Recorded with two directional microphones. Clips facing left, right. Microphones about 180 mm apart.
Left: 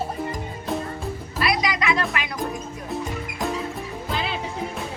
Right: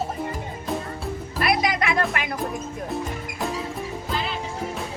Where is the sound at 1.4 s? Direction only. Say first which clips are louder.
Right 1 dB; 50° right (ahead or behind).